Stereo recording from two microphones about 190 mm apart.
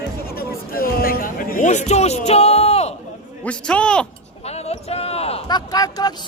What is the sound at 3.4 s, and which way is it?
Speech, 5° left (ahead or behind).